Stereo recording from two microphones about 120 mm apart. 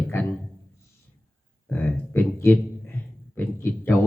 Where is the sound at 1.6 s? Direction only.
15° left (ahead or behind).